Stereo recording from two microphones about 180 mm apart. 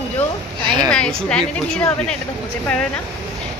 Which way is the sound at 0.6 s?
25° right (ahead or behind).